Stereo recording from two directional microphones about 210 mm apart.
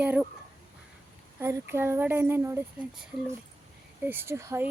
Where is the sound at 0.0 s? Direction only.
10° right (ahead or behind).